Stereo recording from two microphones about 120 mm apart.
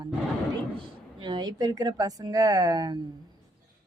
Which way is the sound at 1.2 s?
40° right (ahead or behind).